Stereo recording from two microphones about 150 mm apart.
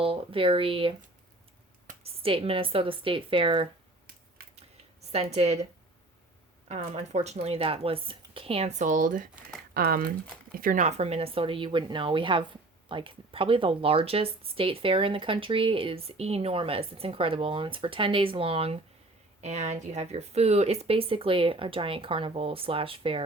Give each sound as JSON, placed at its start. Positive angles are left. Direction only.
{"t": 0.0, "sound": "speech", "side_deg": -40}
{"t": 2.0, "sound": "speech", "side_deg": -35}
{"t": 4.4, "sound": "a sound", "side_deg": -85}
{"t": 5.1, "sound": "speech", "side_deg": -45}
{"t": 6.7, "sound": "speech", "side_deg": -45}
{"t": 9.7, "sound": "speech", "side_deg": -75}